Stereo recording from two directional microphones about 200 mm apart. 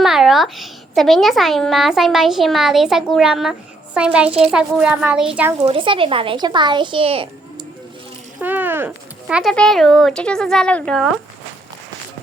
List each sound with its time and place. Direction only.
0.0 s speech: centre (ahead or behind)
4.3 s speech: 30° right (ahead or behind)
4.5 s speech: 5° right (ahead or behind)
5.6 s speech: 25° right (ahead or behind)
8.4 s speech: 10° right (ahead or behind)